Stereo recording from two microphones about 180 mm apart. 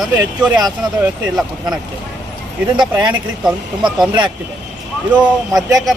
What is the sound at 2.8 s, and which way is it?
Speech, 25° right (ahead or behind).